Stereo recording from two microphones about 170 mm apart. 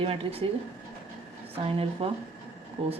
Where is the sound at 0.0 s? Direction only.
35° right (ahead or behind).